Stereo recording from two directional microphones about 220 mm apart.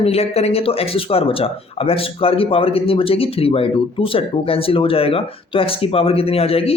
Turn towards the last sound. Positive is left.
turn(degrees=25)  # may be behind; listen again after turning